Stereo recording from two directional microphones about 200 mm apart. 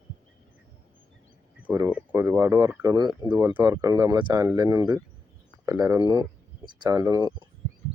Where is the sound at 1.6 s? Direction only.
10° right (ahead or behind).